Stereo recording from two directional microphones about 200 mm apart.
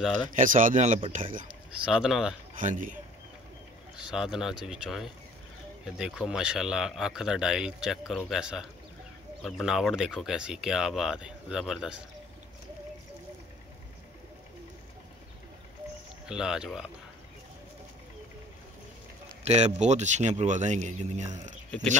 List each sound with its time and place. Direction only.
0.4 s speech: 40° right (ahead or behind)
1.9 s speech: centre (ahead or behind)
2.6 s speech: 40° right (ahead or behind)
3.9 s speech: 5° right (ahead or behind)
16.3 s speech: 5° right (ahead or behind)
19.4 s speech: 35° right (ahead or behind)